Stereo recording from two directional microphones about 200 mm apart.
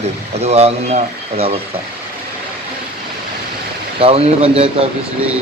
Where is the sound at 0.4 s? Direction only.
30° right (ahead or behind).